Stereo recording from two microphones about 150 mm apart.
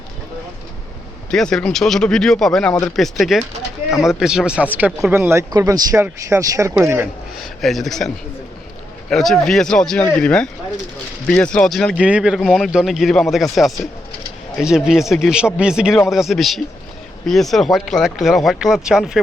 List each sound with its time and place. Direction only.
1.3 s a man's voice: 5° left (ahead or behind)
4.9 s a man's voice: centre (ahead or behind)
5.1 s speech: 15° right (ahead or behind)
7.3 s a man's voice: centre (ahead or behind)